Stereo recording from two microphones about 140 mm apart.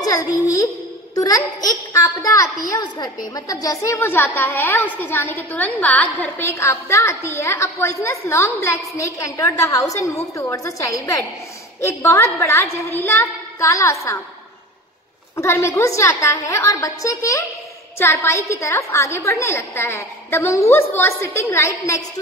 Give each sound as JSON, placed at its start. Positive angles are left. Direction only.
{"t": 1.1, "sound": "a woman's voice", "side_deg": 25}
{"t": 15.3, "sound": "a woman's voice", "side_deg": 20}